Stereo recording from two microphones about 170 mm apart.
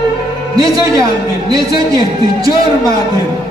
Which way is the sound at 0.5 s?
20° right (ahead or behind).